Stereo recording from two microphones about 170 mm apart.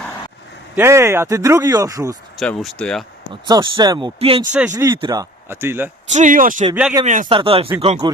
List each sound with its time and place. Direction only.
0.8 s speech: 15° right (ahead or behind)
2.4 s speech: centre (ahead or behind)
3.4 s speech: 25° right (ahead or behind)
4.5 s speech: 10° right (ahead or behind)
6.1 s speech: 50° right (ahead or behind)
7.3 s speech: 30° right (ahead or behind)